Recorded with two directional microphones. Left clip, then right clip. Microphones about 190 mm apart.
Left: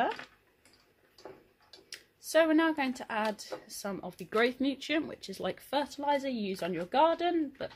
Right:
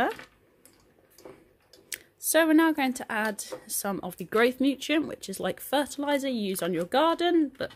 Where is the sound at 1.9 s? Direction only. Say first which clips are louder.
Right 7 dB; 40° right (ahead or behind).